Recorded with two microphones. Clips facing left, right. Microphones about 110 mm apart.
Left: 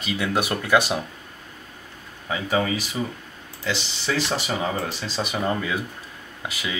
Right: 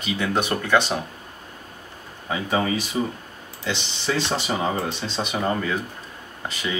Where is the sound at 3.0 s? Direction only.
15° right (ahead or behind).